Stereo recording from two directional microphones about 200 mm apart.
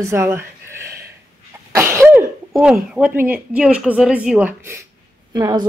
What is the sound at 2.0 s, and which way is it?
A woman's voice, 5° right (ahead or behind).